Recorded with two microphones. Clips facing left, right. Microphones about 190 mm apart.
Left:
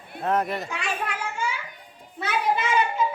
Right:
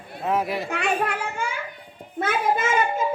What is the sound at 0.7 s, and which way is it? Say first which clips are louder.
Speech: right 6 dB; 60° right (ahead or behind).